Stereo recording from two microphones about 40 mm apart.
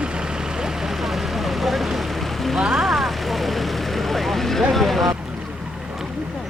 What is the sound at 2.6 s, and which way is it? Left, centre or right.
Vehicle, centre.